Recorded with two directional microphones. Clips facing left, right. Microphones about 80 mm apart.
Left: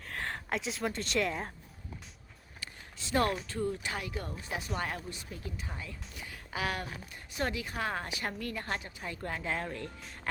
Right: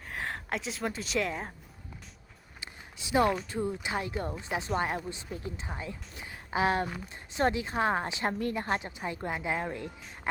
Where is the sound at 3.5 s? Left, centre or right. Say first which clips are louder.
Right 2 dB; centre.